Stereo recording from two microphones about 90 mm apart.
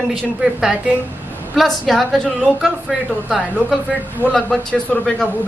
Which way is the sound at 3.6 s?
15° right (ahead or behind).